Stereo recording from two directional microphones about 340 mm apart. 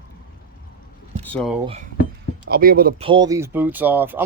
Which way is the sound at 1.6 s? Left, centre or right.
Centre.